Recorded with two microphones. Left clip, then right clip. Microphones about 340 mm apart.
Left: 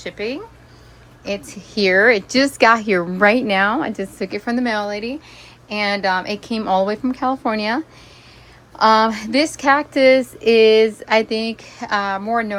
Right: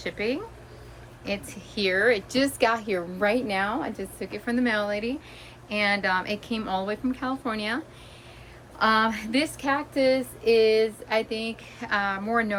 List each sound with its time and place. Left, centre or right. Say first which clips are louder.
0.0 s a woman's voice: left 3 dB; centre
8.8 s speech: left 8 dB; centre